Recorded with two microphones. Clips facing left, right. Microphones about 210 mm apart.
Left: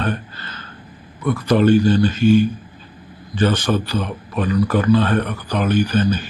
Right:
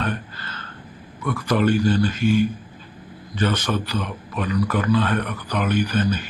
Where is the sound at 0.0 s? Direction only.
30° left (ahead or behind).